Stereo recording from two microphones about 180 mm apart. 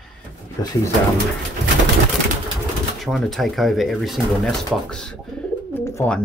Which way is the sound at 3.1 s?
Centre (ahead or behind).